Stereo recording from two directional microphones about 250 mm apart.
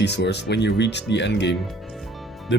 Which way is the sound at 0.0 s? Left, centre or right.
Left.